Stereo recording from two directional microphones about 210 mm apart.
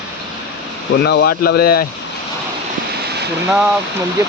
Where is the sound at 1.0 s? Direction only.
50° left (ahead or behind).